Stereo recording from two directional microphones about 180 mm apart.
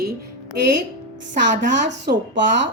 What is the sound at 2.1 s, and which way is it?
Speech, 60° right (ahead or behind).